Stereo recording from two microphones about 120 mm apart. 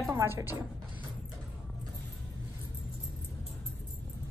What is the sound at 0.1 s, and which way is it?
Speech, 20° right (ahead or behind).